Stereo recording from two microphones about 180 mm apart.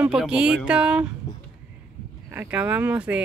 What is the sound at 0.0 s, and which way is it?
Speech, 5° right (ahead or behind).